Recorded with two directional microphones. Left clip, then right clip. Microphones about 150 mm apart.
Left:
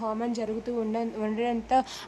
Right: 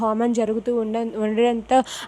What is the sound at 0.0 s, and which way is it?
Speech, 45° right (ahead or behind).